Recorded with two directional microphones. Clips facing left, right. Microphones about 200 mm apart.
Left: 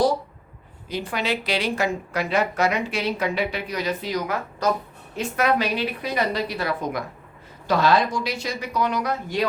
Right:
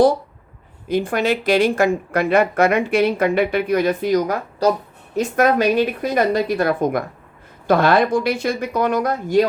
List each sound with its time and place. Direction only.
0.9 s a woman's voice: 50° right (ahead or behind)
4.6 s speech: 35° right (ahead or behind)
5.1 s a woman's voice: 45° right (ahead or behind)